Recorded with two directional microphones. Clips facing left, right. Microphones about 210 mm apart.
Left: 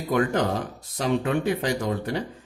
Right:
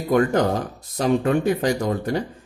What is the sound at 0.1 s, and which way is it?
Speech, 45° right (ahead or behind).